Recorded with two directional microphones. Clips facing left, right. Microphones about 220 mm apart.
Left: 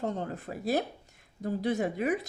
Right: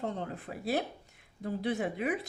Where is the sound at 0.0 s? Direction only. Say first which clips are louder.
Left 3 dB; 45° left (ahead or behind).